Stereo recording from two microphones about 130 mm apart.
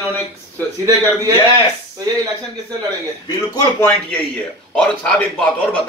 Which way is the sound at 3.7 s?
10° left (ahead or behind).